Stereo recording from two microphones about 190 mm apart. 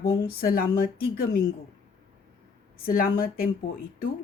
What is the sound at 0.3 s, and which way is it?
A woman's voice, 50° left (ahead or behind).